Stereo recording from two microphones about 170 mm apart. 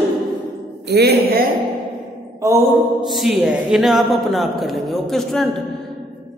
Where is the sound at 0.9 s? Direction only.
70° right (ahead or behind).